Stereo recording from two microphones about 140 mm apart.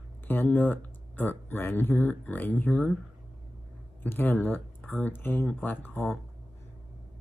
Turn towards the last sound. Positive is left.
turn(degrees=15)  # may be behind; listen again after turning